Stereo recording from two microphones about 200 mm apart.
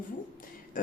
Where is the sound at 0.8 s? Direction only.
45° left (ahead or behind).